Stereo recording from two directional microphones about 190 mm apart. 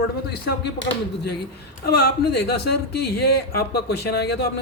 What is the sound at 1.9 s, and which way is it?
A man's voice, 60° left (ahead or behind).